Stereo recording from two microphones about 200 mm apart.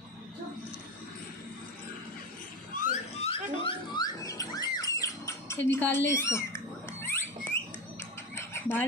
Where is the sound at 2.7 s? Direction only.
35° left (ahead or behind); by 7.2 s 10° left (ahead or behind).